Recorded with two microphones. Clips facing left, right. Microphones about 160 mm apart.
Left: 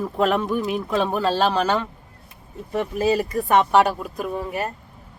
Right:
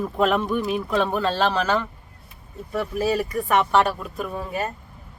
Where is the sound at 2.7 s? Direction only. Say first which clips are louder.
Left 2 dB; 20° left (ahead or behind).